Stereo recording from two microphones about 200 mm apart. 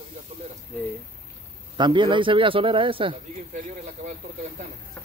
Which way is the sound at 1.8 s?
25° right (ahead or behind).